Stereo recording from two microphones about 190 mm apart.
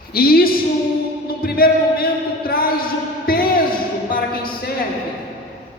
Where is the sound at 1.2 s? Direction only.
50° left (ahead or behind).